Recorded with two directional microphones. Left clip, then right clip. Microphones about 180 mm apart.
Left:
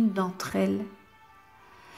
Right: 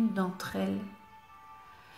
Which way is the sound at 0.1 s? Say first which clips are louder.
Left 5 dB; 35° left (ahead or behind).